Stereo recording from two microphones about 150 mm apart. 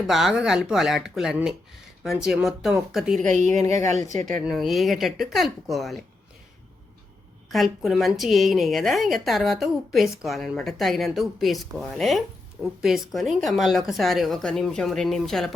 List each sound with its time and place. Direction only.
0.1 s a woman's voice: 5° right (ahead or behind)
3.2 s a woman's voice: 55° right (ahead or behind)
4.4 s a woman's voice: centre (ahead or behind)
7.5 s a woman's voice: centre (ahead or behind)